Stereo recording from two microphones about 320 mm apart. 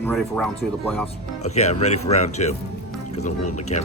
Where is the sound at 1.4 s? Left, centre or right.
Centre.